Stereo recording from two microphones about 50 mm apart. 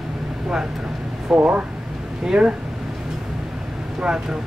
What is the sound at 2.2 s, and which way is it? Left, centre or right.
Speech, centre.